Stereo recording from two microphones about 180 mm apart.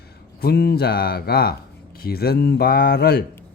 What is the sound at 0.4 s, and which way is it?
Speech, 60° left (ahead or behind).